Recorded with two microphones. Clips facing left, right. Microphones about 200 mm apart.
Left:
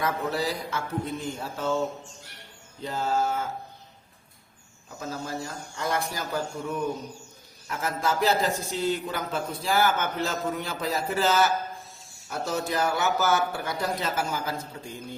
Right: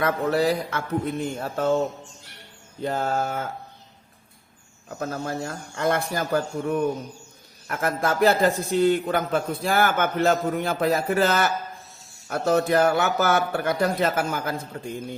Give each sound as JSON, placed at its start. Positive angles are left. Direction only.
{"t": 0.0, "sound": "a man's voice", "side_deg": -60}
{"t": 2.8, "sound": "a man's voice", "side_deg": -55}
{"t": 4.9, "sound": "a man's voice", "side_deg": -55}